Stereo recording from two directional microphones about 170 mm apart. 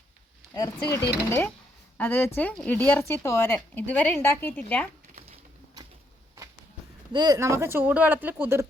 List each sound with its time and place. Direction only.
0.5 s speech: 20° left (ahead or behind)
1.3 s speech: 10° left (ahead or behind)
5.1 s a sound: 35° right (ahead or behind)
7.1 s speech: 25° right (ahead or behind)